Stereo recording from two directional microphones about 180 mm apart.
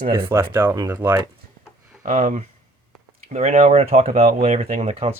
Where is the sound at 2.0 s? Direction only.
45° right (ahead or behind).